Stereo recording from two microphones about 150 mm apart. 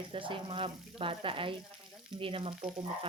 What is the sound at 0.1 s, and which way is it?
Speech, 35° right (ahead or behind).